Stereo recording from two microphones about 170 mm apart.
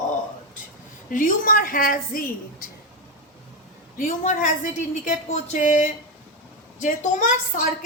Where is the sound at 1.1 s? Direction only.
50° left (ahead or behind).